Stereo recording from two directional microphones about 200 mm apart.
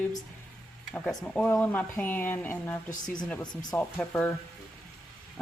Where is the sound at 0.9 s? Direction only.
5° left (ahead or behind).